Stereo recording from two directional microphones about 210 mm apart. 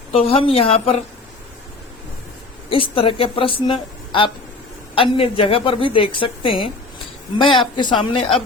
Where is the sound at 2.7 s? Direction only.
25° left (ahead or behind).